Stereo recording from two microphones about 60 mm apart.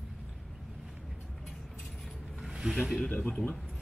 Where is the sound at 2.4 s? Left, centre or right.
Centre.